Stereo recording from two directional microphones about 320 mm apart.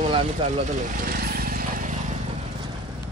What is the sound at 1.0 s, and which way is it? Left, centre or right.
Vehicle, right.